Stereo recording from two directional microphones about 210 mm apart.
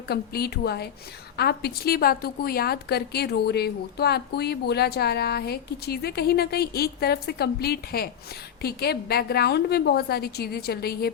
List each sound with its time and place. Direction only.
0.1 s a woman's voice: 50° left (ahead or behind)